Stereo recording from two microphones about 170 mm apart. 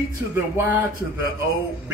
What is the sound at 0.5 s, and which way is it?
Speech, 10° right (ahead or behind).